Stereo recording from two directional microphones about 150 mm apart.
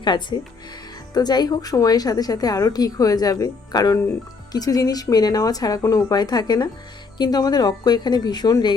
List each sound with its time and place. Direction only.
0.0 s a woman's voice: 30° left (ahead or behind)